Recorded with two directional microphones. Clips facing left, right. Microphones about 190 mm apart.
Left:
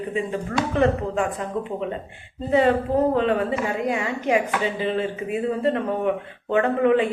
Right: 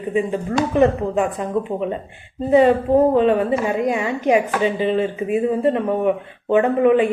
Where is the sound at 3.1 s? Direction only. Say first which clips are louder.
Right 5 dB; 20° right (ahead or behind).